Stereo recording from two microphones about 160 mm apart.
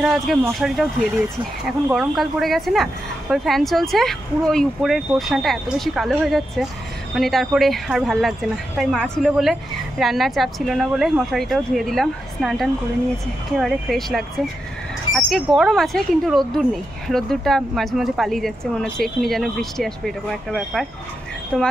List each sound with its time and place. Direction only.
0.0 s speech: 5° right (ahead or behind)
1.9 s speech: centre (ahead or behind)